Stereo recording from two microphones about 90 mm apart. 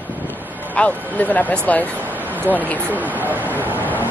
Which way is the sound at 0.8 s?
15° left (ahead or behind).